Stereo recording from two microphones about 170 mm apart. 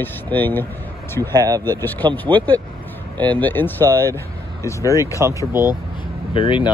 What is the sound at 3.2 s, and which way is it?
Speech, 10° left (ahead or behind).